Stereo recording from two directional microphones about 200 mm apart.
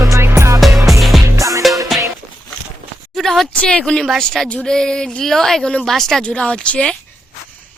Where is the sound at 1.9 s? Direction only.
Centre (ahead or behind).